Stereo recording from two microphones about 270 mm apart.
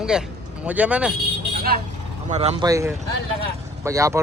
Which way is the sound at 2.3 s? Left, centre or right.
Right.